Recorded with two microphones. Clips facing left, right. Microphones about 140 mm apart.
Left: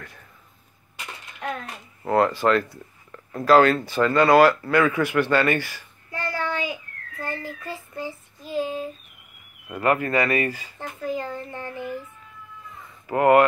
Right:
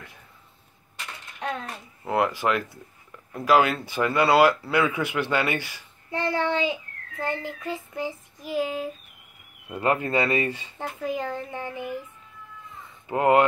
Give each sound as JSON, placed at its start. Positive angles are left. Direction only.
{"t": 2.0, "sound": "speech", "side_deg": -10}
{"t": 9.7, "sound": "speech", "side_deg": -25}
{"t": 13.1, "sound": "speech", "side_deg": -20}